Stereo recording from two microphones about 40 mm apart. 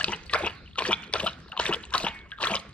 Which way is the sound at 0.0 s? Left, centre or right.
Left.